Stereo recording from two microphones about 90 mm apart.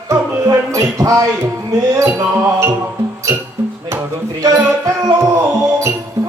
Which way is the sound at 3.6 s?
25° right (ahead or behind).